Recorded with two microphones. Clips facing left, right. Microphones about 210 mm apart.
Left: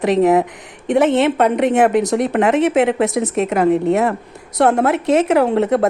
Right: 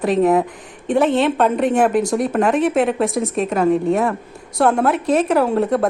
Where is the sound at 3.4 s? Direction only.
70° left (ahead or behind).